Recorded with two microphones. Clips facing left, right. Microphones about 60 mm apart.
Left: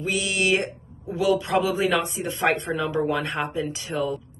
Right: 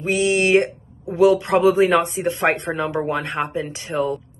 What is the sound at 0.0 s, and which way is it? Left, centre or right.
Speech, right.